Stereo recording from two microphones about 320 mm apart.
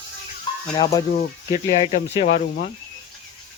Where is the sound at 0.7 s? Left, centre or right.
Centre.